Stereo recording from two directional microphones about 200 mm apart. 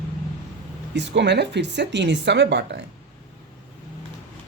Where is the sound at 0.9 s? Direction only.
60° right (ahead or behind).